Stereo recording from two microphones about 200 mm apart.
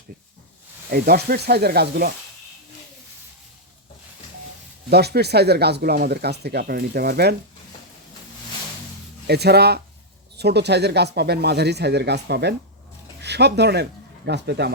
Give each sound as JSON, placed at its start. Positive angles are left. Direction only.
{"t": 0.9, "sound": "speech", "side_deg": -50}
{"t": 4.9, "sound": "speech", "side_deg": -55}
{"t": 9.2, "sound": "speech", "side_deg": -55}